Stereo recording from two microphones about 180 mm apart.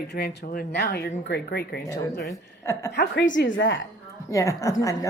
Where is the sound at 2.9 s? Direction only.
65° left (ahead or behind); by 3.8 s 90° left.